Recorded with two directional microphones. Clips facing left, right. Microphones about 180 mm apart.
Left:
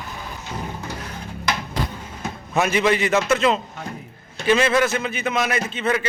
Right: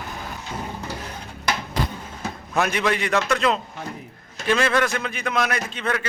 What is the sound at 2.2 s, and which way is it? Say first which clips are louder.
A man's voice: left 2 dB; 5° left (ahead or behind).